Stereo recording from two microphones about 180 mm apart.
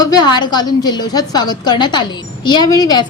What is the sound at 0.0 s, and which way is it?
A woman's voice, 25° left (ahead or behind).